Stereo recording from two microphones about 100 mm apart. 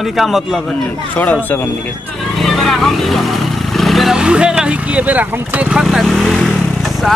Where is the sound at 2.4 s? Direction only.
5° left (ahead or behind); by 5.8 s 15° right (ahead or behind).